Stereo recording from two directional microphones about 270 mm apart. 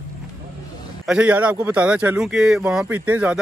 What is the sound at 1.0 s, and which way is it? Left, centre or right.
Speech, centre.